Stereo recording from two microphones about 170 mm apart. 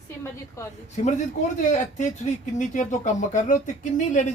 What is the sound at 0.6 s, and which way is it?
Speech, 15° left (ahead or behind).